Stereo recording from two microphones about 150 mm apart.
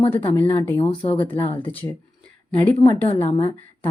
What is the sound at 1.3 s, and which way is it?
Speech, 35° left (ahead or behind).